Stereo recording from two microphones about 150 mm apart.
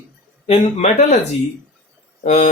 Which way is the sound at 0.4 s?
45° left (ahead or behind).